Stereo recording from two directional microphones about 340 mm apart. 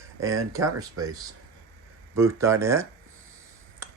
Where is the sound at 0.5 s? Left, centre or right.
Centre.